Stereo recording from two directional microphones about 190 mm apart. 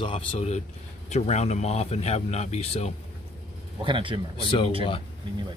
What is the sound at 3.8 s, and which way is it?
Speech, 25° right (ahead or behind).